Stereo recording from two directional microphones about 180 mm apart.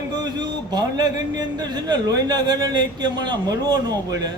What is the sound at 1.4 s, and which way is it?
A man's voice, 25° right (ahead or behind).